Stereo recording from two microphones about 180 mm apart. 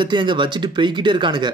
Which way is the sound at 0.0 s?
25° right (ahead or behind).